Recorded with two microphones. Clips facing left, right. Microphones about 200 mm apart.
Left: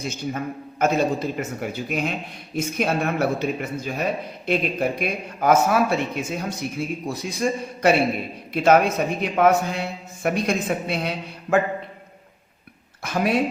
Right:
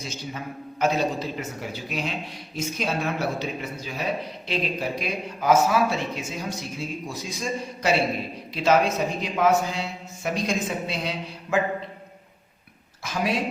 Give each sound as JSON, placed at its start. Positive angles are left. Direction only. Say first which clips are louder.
{"t": 0.0, "sound": "a man's voice", "louder": "left 6 dB", "side_deg": 55}
{"t": 13.0, "sound": "a man's voice", "louder": "left 4 dB", "side_deg": 60}